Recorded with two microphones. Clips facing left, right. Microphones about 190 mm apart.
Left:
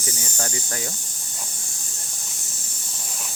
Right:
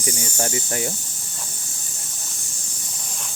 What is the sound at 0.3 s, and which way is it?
Speech, 25° right (ahead or behind).